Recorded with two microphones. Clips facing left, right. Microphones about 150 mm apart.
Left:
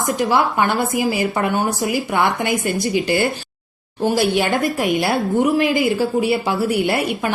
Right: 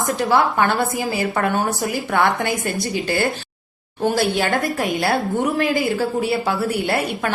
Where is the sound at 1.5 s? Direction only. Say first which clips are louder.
Left 1 dB; centre (ahead or behind).